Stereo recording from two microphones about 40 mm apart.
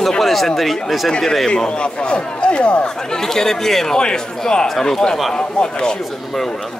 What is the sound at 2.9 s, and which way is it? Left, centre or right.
A man's voice, centre.